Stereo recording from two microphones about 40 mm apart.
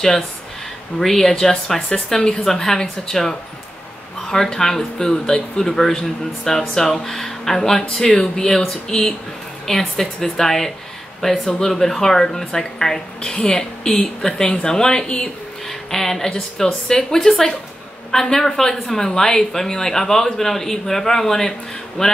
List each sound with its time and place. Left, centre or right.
0.9 s a woman's voice: centre
2.1 s a woman's voice: left
2.4 s a woman's voice: centre